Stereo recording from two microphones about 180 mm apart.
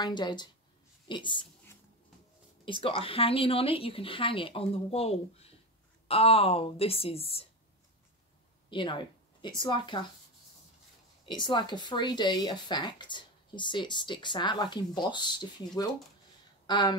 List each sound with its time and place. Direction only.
0.0 s speech: 25° left (ahead or behind)
2.6 s speech: 30° left (ahead or behind)
8.6 s speech: 25° left (ahead or behind)
11.2 s speech: 25° left (ahead or behind)